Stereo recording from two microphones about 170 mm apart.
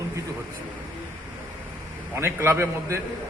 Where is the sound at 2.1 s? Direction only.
15° right (ahead or behind).